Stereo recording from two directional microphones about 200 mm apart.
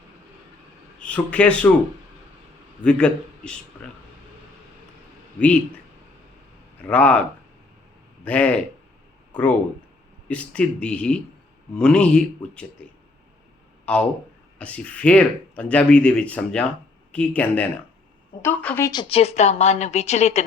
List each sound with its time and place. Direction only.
0.9 s speech: 5° left (ahead or behind)
2.8 s speech: 5° left (ahead or behind)
6.7 s speech: 5° left (ahead or behind)
8.2 s speech: 5° left (ahead or behind)
13.8 s speech: 5° left (ahead or behind)
18.9 s a woman's voice: 25° left (ahead or behind)